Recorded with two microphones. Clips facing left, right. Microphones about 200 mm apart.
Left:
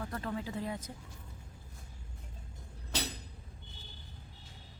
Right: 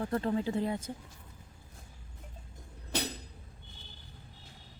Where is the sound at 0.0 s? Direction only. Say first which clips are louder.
Right 7 dB; 30° right (ahead or behind).